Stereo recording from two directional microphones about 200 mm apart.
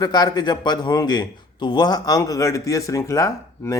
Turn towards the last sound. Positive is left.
turn(degrees=15)  # may be behind; listen again after turning